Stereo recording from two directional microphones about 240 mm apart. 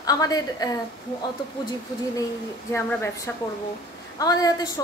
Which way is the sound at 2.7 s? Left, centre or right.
Centre.